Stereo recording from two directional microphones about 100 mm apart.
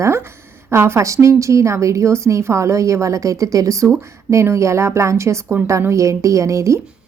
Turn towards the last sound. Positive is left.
turn(degrees=-30)  # may be behind; listen again after turning